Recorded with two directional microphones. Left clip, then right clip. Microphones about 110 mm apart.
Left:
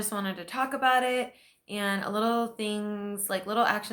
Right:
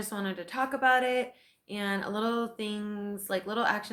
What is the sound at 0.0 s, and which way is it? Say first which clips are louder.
A woman's voice: left 2 dB; 30° left (ahead or behind).